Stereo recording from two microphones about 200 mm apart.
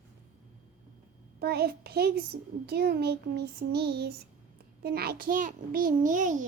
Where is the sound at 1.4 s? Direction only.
50° right (ahead or behind).